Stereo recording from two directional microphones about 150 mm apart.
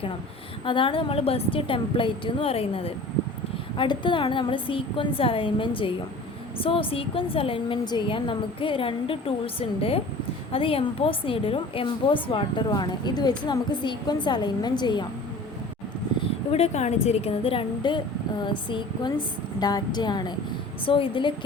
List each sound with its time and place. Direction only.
0.6 s a woman's voice: 35° left (ahead or behind)
16.5 s a woman's voice: 45° left (ahead or behind)